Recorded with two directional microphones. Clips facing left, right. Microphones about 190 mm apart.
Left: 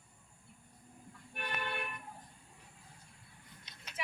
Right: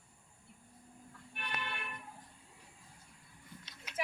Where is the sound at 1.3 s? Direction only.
45° left (ahead or behind).